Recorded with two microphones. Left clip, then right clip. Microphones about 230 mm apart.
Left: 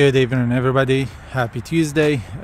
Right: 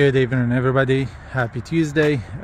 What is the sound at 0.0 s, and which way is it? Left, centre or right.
Speech, centre.